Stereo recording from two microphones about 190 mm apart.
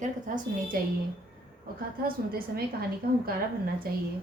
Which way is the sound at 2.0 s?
50° right (ahead or behind).